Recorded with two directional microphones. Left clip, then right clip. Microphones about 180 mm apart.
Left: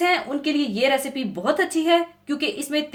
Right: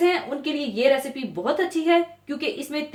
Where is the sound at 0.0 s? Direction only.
55° left (ahead or behind).